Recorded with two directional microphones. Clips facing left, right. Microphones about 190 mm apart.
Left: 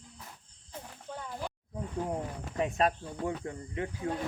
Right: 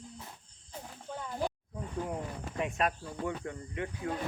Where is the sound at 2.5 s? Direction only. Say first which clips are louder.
Left 3 dB; 35° left (ahead or behind).